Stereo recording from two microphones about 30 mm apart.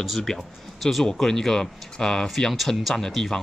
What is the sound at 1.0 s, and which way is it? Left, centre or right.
Speech, centre.